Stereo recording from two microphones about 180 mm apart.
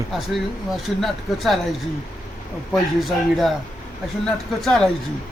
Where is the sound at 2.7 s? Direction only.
Centre (ahead or behind).